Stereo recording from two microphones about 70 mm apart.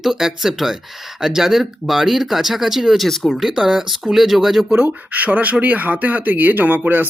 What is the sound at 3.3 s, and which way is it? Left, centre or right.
Speech, centre.